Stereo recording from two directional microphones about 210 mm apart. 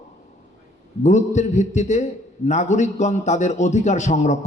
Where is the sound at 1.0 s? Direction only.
35° left (ahead or behind).